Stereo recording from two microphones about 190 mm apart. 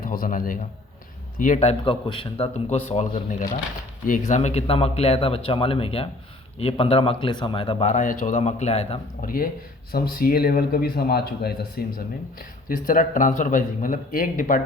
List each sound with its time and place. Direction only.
0.0 s a man's voice: 45° left (ahead or behind)
9.2 s speech: 50° left (ahead or behind)